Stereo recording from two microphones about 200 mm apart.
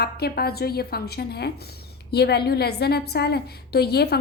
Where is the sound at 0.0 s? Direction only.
55° left (ahead or behind).